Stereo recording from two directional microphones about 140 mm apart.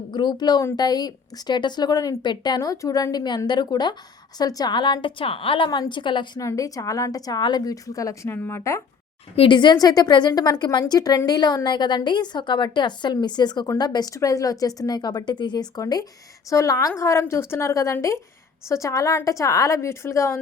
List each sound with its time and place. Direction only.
0.1 s a woman's voice: 30° left (ahead or behind)
6.4 s speech: 25° left (ahead or behind)
9.3 s a woman's voice: 35° left (ahead or behind); by 20.4 s 20° left (ahead or behind)